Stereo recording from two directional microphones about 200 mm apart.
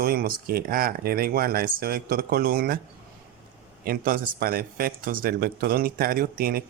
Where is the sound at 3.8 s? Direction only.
45° right (ahead or behind).